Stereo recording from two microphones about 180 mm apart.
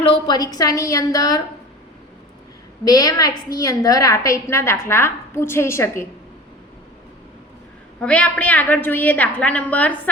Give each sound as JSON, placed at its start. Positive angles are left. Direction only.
{"t": 0.0, "sound": "a woman's voice", "side_deg": 30}
{"t": 2.8, "sound": "a woman's voice", "side_deg": 20}
{"t": 8.0, "sound": "a woman's voice", "side_deg": 5}